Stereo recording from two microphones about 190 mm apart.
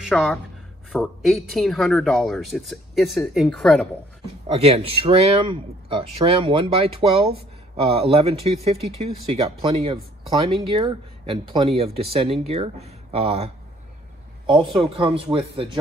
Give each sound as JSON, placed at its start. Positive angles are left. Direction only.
{"t": 0.1, "sound": "speech", "side_deg": 0}
{"t": 4.5, "sound": "speech", "side_deg": -30}
{"t": 14.8, "sound": "speech", "side_deg": -30}